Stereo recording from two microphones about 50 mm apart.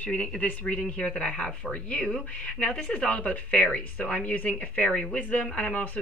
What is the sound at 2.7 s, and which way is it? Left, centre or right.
Speech, centre.